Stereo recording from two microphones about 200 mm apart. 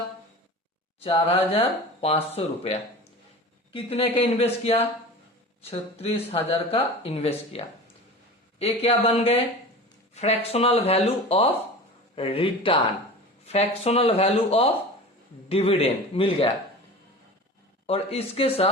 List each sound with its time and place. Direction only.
0.9 s speech: 30° left (ahead or behind)
17.8 s speech: 30° left (ahead or behind)